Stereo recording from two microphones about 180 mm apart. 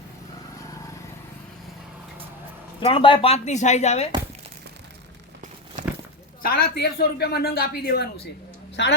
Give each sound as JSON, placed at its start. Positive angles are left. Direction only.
{"t": 2.8, "sound": "speech", "side_deg": 30}
{"t": 5.8, "sound": "a sound", "side_deg": -45}
{"t": 6.4, "sound": "speech", "side_deg": 55}
{"t": 8.7, "sound": "speech", "side_deg": 70}